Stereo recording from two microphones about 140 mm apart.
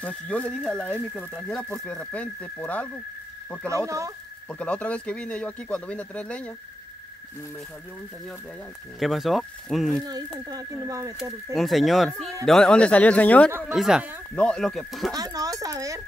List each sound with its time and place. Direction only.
0.0 s speech: 10° left (ahead or behind)
3.6 s speech: 20° right (ahead or behind)
4.5 s speech: 10° left (ahead or behind)
9.0 s speech: centre (ahead or behind)
10.0 s speech: 30° right (ahead or behind)
11.5 s speech: centre (ahead or behind)
13.7 s speech: 5° right (ahead or behind)
14.3 s speech: 5° left (ahead or behind)
15.1 s speech: 25° right (ahead or behind)